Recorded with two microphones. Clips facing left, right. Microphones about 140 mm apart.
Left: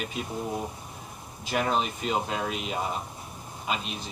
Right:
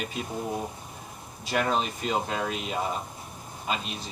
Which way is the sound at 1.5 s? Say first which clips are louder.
Even; 45° right (ahead or behind).